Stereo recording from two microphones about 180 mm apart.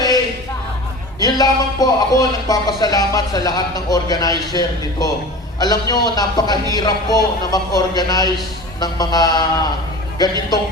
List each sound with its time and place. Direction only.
1.2 s speech: 20° left (ahead or behind)